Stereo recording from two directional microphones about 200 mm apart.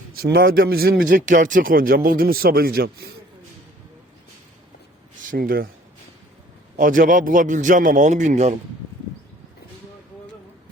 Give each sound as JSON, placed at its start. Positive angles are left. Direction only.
{"t": 0.2, "sound": "speech", "side_deg": -50}
{"t": 5.2, "sound": "speech", "side_deg": -45}
{"t": 6.7, "sound": "a man's voice", "side_deg": -40}